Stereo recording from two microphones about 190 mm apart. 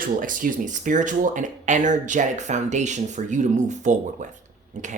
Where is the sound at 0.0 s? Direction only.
45° right (ahead or behind).